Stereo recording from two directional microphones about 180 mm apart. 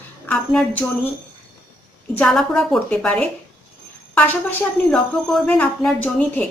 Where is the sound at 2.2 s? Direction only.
Centre (ahead or behind).